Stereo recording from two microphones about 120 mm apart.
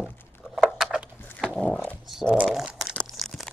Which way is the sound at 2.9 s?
5° left (ahead or behind).